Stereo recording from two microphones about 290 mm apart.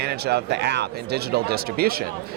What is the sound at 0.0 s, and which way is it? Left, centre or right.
Speech, right.